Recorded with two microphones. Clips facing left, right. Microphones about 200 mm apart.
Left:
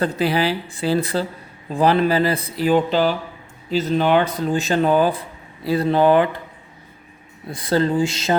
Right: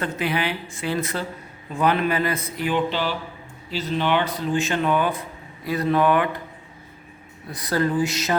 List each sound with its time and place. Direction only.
0.0 s speech: 35° left (ahead or behind)
7.5 s speech: 25° left (ahead or behind)